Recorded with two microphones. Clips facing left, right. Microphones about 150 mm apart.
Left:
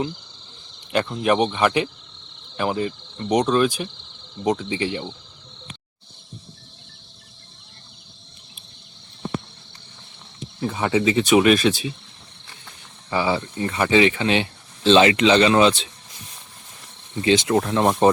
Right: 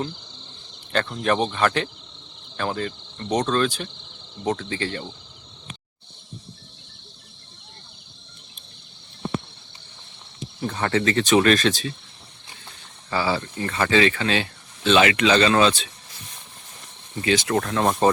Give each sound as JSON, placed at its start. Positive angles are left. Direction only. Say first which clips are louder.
{"t": 0.9, "sound": "speech", "louder": "left 3 dB", "side_deg": 10}
{"t": 10.6, "sound": "speech", "louder": "left 2 dB", "side_deg": 10}
{"t": 13.1, "sound": "speech", "louder": "left 2 dB", "side_deg": 20}
{"t": 17.2, "sound": "speech", "louder": "left 3 dB", "side_deg": 25}